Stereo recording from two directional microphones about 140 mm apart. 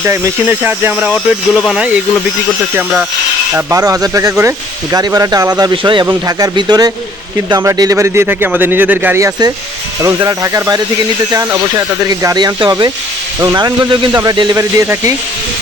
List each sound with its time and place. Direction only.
0.0 s speech: 15° right (ahead or behind)
3.7 s speech: 25° right (ahead or behind)